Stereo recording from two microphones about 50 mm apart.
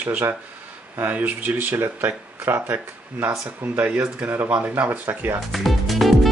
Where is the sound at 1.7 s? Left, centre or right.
Right.